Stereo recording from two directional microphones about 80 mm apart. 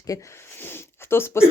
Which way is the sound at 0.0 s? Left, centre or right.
Left.